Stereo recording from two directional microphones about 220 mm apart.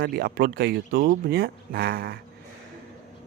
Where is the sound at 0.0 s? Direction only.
45° right (ahead or behind).